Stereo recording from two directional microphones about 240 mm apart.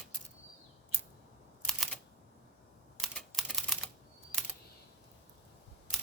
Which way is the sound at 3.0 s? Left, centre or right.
Centre.